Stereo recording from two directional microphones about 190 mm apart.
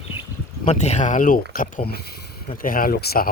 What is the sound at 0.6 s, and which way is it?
Speech, 35° left (ahead or behind).